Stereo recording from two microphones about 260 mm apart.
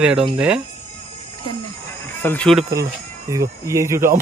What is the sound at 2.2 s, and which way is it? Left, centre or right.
Speech, centre.